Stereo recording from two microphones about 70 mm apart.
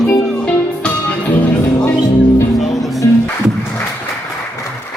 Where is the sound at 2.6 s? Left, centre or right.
Centre.